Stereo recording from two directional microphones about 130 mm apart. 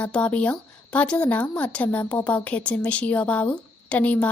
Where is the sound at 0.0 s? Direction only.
10° left (ahead or behind).